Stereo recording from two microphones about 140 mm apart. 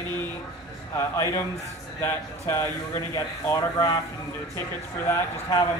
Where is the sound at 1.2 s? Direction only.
20° left (ahead or behind).